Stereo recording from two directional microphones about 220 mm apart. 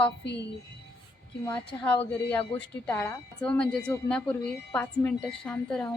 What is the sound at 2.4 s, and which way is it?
Speech, 25° left (ahead or behind).